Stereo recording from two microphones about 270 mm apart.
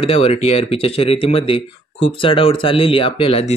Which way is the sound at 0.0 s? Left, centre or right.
Left.